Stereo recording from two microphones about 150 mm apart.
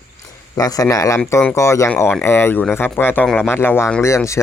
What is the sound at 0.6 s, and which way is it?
Speech, 25° left (ahead or behind).